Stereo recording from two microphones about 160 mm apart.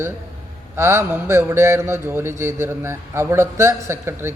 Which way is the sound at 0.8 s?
15° right (ahead or behind).